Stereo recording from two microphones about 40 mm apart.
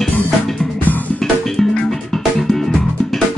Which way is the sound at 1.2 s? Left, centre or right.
Centre.